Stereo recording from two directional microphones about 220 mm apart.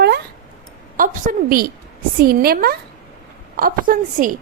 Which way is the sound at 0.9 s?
35° right (ahead or behind).